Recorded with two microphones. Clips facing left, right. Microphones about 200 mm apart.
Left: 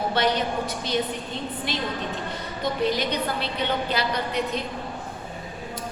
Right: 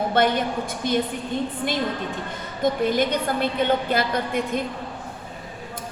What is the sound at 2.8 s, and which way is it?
A woman's voice, 50° right (ahead or behind).